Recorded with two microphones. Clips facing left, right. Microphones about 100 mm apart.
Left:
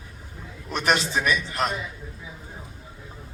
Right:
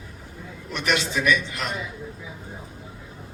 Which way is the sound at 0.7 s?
35° left (ahead or behind).